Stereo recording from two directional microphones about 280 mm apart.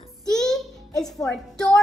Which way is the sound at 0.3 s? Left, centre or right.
Centre.